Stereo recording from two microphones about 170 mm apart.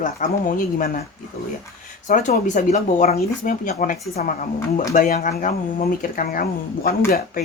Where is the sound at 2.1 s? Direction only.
45° left (ahead or behind); by 6.9 s 60° left (ahead or behind).